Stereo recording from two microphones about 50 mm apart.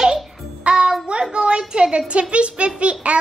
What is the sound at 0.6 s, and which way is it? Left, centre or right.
Music, centre.